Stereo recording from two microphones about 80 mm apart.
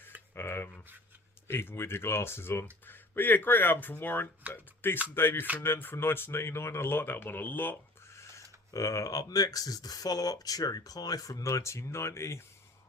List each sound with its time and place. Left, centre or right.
0.3 s speech: left
8.1 s speech: left